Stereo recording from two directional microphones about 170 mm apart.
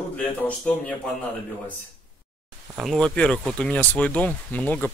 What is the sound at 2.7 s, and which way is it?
Speech, centre (ahead or behind).